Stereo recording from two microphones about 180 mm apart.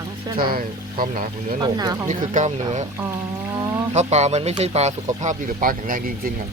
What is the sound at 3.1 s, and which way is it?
Speech, 15° right (ahead or behind).